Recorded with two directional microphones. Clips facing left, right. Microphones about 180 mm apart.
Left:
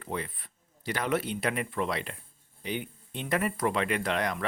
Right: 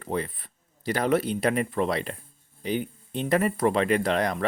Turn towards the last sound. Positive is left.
turn(degrees=-35)  # may be behind; listen again after turning